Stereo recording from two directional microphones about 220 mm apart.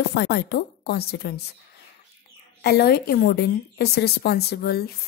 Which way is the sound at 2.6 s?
45° left (ahead or behind).